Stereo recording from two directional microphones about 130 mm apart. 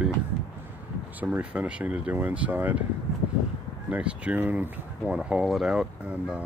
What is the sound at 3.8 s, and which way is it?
Speech, 10° right (ahead or behind).